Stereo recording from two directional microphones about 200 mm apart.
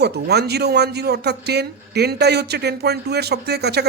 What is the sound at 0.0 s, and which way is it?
Speech, 55° right (ahead or behind).